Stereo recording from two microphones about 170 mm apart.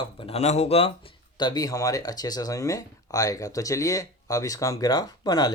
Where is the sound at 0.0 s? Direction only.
35° left (ahead or behind).